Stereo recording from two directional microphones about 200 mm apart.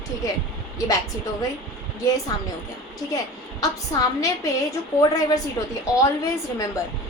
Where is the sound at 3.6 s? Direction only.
15° left (ahead or behind).